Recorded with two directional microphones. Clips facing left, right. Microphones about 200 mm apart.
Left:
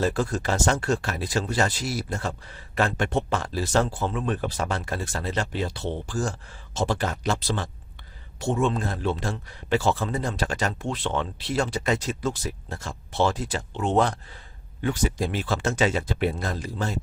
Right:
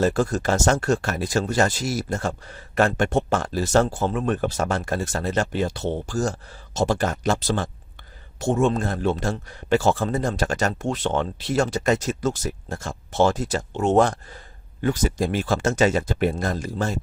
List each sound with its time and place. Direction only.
0.0 s speech: 45° right (ahead or behind)